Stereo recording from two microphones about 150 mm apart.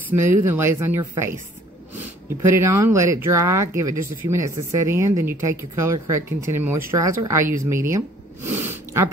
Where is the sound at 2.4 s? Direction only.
20° right (ahead or behind).